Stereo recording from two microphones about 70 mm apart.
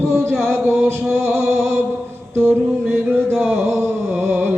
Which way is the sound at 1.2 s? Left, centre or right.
Right.